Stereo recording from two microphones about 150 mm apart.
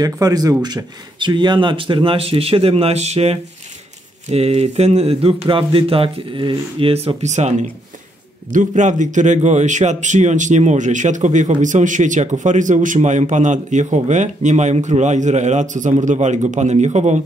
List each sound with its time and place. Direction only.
0.0 s speech: 25° right (ahead or behind); by 17.2 s 50° right (ahead or behind)